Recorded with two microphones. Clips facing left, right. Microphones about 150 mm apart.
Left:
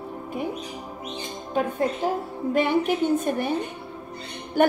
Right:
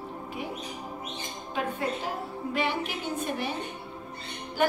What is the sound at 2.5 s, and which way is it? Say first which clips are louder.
A woman's voice: left 9 dB; 50° left (ahead or behind).